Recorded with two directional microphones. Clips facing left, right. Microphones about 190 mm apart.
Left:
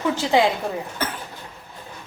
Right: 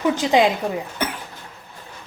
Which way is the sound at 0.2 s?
15° right (ahead or behind).